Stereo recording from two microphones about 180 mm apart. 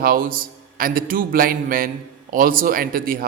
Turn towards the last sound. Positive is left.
turn(degrees=-50)  # may be behind; listen again after turning